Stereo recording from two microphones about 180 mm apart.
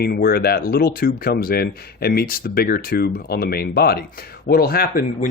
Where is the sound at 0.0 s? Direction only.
60° left (ahead or behind).